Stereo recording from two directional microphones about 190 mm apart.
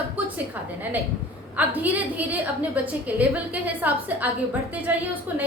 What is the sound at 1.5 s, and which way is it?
A woman's voice, 10° right (ahead or behind).